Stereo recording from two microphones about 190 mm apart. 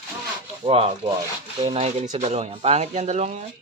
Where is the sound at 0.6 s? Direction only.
35° right (ahead or behind).